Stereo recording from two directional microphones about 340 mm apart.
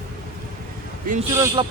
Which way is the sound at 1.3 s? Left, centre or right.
Centre.